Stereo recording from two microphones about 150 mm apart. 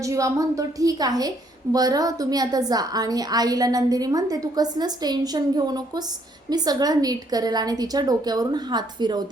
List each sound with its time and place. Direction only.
0.0 s a woman's voice: 20° right (ahead or behind)